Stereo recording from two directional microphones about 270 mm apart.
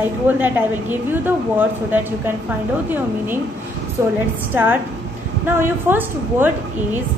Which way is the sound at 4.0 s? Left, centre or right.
Centre.